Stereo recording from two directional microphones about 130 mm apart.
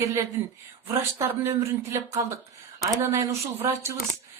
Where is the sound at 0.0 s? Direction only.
20° right (ahead or behind).